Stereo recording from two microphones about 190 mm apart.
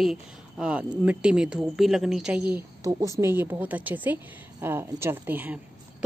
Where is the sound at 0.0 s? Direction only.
5° right (ahead or behind).